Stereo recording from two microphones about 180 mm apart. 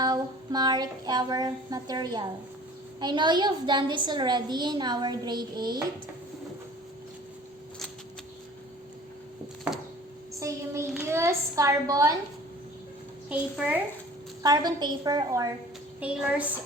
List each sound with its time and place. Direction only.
0.0 s a woman's voice: 25° right (ahead or behind)
11.0 s a woman's voice: 15° right (ahead or behind)
13.2 s a woman's voice: 5° right (ahead or behind)
14.4 s a woman's voice: 20° right (ahead or behind)
16.0 s a woman's voice: 5° right (ahead or behind)